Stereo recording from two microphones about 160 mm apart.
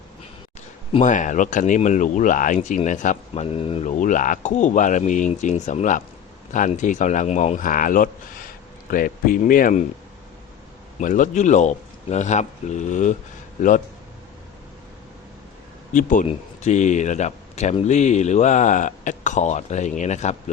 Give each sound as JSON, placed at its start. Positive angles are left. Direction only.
{"t": 1.0, "sound": "speech", "side_deg": 50}
{"t": 4.0, "sound": "speech", "side_deg": 55}
{"t": 11.0, "sound": "speech", "side_deg": 55}
{"t": 15.9, "sound": "speech", "side_deg": 55}